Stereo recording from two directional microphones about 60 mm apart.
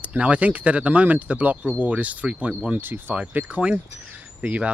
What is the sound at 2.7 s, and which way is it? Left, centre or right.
Speech, right.